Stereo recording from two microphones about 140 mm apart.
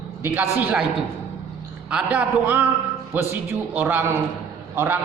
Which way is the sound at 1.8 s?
10° right (ahead or behind).